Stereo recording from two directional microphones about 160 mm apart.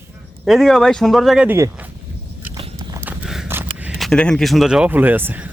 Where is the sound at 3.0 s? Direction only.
10° right (ahead or behind).